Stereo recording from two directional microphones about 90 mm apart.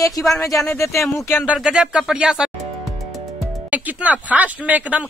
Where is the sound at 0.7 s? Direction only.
35° left (ahead or behind).